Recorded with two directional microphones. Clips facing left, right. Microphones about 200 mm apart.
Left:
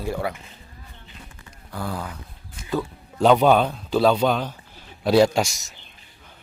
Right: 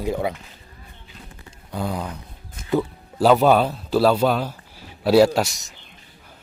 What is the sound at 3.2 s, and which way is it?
A man's voice, 5° right (ahead or behind).